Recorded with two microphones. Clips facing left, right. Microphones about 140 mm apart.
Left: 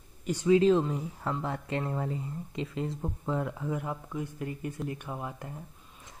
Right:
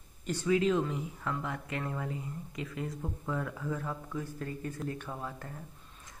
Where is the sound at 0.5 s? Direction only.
30° left (ahead or behind).